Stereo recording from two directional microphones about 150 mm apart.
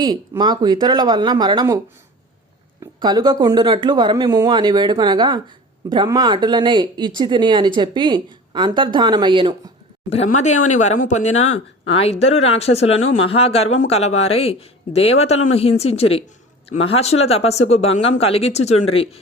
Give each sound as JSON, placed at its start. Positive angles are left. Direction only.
{"t": 0.0, "sound": "speech", "side_deg": -30}
{"t": 2.8, "sound": "speech", "side_deg": -30}
{"t": 10.2, "sound": "speech", "side_deg": 55}